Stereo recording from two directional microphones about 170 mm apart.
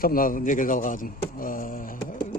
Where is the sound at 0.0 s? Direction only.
55° left (ahead or behind).